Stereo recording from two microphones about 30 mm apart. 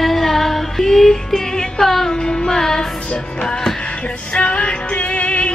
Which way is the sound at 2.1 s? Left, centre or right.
Left.